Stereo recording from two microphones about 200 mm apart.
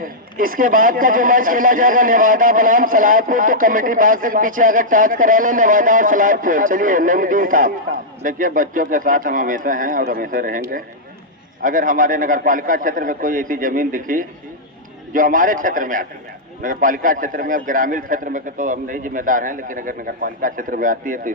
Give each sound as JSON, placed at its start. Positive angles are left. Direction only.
{"t": 0.0, "sound": "a man's voice", "side_deg": -45}
{"t": 11.6, "sound": "a man's voice", "side_deg": -40}